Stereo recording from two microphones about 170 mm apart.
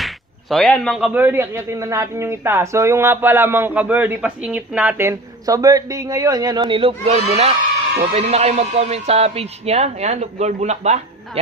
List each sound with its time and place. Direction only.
0.0 s a man's voice: centre (ahead or behind); by 11.0 s 40° right (ahead or behind)